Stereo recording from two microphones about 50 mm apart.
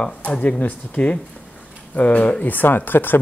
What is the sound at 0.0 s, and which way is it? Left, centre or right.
Speech, left.